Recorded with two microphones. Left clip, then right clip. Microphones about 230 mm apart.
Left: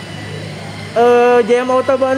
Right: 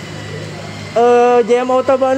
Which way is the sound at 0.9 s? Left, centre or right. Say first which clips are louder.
Even; centre.